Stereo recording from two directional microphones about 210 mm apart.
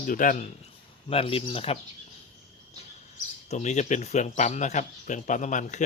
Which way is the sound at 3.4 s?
35° left (ahead or behind).